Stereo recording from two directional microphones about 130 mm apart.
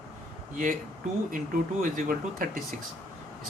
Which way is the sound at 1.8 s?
90° right.